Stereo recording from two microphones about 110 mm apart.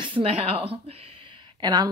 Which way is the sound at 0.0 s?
55° right (ahead or behind).